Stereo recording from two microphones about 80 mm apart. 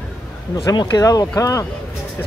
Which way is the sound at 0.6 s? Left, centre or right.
Left.